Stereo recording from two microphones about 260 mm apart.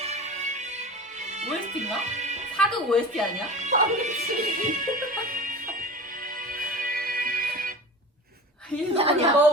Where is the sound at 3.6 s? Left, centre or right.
Right.